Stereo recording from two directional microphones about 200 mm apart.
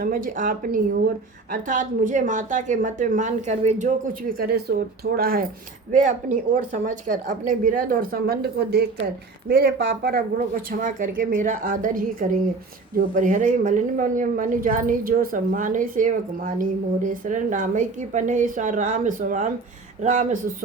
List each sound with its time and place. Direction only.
0.0 s a woman's voice: 45° right (ahead or behind)